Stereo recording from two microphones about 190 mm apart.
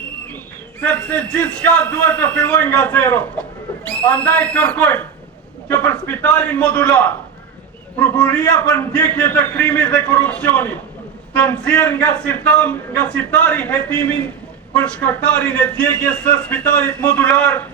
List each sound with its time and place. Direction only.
0.8 s a man's voice: 5° left (ahead or behind)
8.2 s a man's voice: 5° left (ahead or behind)